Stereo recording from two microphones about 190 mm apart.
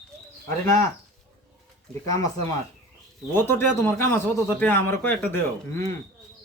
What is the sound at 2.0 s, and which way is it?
Speech, 20° left (ahead or behind).